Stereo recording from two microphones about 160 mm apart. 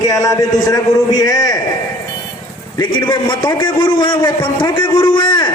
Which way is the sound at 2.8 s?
30° left (ahead or behind).